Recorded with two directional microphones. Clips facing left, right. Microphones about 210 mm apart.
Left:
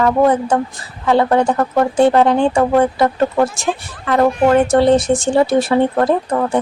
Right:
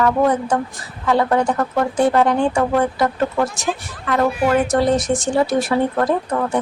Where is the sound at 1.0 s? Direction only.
30° left (ahead or behind).